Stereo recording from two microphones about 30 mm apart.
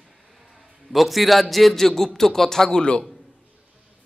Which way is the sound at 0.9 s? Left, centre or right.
Centre.